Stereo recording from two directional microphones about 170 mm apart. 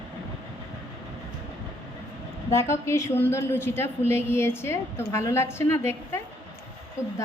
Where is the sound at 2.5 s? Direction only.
15° left (ahead or behind).